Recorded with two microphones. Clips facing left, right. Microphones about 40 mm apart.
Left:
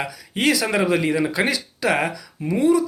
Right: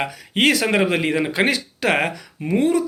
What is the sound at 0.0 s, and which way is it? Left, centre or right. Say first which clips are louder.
Speech: right 3 dB; right.